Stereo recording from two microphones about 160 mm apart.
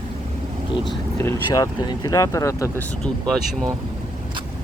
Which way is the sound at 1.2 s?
20° left (ahead or behind).